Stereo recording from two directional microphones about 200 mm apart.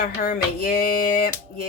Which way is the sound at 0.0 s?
45° left (ahead or behind).